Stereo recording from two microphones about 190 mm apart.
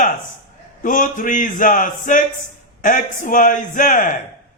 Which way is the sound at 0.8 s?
45° left (ahead or behind).